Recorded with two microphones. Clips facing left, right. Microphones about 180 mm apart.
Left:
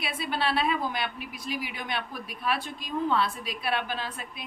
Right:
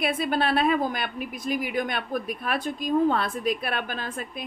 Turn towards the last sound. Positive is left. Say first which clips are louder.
# even
turn(degrees=-50)  # may be behind; listen again after turning